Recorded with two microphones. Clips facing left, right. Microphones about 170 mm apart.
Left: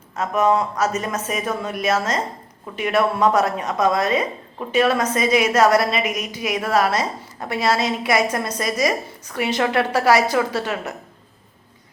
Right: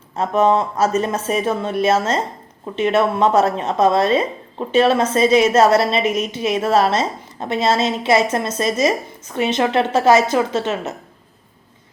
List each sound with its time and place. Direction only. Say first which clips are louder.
0.2 s speech: right 3 dB; 30° right (ahead or behind)